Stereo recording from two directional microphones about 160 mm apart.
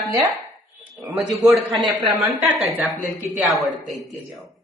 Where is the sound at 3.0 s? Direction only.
50° right (ahead or behind).